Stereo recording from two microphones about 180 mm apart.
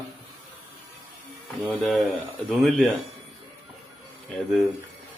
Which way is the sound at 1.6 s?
Centre (ahead or behind).